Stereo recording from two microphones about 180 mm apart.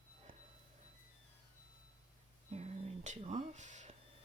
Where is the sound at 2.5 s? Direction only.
35° right (ahead or behind).